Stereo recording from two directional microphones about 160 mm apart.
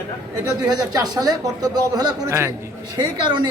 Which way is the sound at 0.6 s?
25° right (ahead or behind).